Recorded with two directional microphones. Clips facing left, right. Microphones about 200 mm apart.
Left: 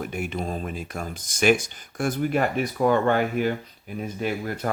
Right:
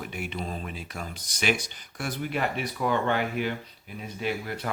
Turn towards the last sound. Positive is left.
turn(degrees=45)  # may be behind; listen again after turning